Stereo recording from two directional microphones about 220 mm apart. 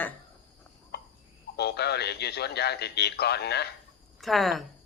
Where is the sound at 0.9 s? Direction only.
50° left (ahead or behind).